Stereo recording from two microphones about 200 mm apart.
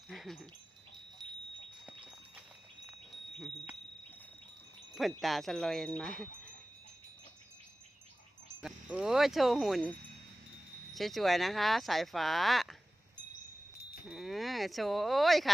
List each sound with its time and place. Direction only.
0.1 s dog: centre (ahead or behind)
1.2 s wind chime: 25° right (ahead or behind)
1.9 s clip-clop: 5° right (ahead or behind)
2.8 s chime: centre (ahead or behind)
4.9 s speech: centre (ahead or behind)
8.6 s speech: 5° right (ahead or behind)
10.9 s speech: centre (ahead or behind)
14.1 s speech: centre (ahead or behind)